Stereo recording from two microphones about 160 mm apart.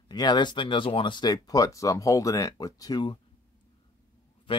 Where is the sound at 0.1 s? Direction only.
25° left (ahead or behind).